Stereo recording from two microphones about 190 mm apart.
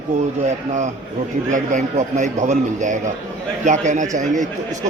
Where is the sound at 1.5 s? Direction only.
40° right (ahead or behind).